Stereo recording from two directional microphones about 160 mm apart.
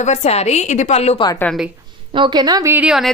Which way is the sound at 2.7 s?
5° right (ahead or behind).